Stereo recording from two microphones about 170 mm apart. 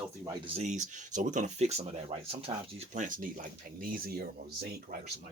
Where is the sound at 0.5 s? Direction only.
45° right (ahead or behind); by 5.0 s 65° right (ahead or behind).